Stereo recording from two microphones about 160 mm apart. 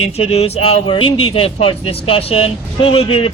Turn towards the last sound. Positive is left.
turn(degrees=35)  # may be behind; listen again after turning